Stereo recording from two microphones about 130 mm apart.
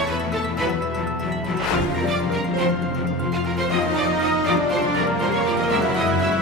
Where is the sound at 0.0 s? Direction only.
Centre (ahead or behind).